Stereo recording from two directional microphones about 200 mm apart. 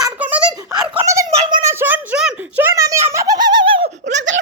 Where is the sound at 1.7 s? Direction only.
10° right (ahead or behind).